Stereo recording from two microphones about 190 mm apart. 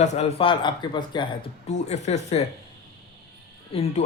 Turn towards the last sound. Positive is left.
turn(degrees=30)  # may be behind; listen again after turning